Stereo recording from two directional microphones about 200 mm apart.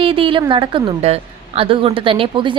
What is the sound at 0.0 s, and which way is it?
A woman's voice, 25° right (ahead or behind).